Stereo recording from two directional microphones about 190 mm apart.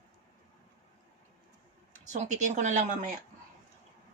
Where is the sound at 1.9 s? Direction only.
40° right (ahead or behind).